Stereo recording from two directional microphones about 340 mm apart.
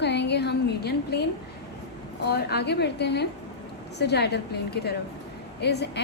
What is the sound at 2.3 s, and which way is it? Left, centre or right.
A woman's voice, left.